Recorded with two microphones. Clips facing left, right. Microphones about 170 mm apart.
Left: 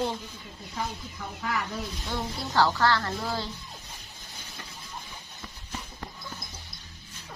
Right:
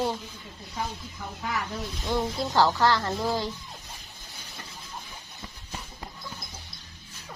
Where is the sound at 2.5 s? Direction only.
15° right (ahead or behind).